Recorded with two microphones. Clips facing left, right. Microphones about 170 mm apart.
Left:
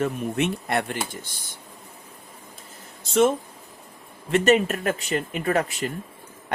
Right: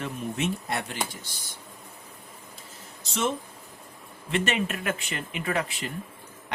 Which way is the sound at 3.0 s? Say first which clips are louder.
Left 9 dB; 50° left (ahead or behind).